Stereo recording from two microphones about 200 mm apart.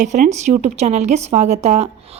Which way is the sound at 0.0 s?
35° right (ahead or behind).